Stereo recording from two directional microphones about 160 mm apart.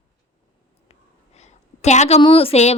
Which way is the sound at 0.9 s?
45° left (ahead or behind).